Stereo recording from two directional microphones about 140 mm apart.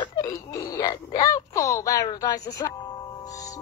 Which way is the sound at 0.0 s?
30° left (ahead or behind).